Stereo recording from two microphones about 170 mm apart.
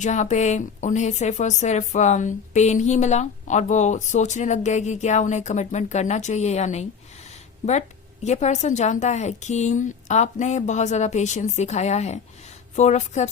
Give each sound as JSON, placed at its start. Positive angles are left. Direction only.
{"t": 0.0, "sound": "a woman's voice", "side_deg": 45}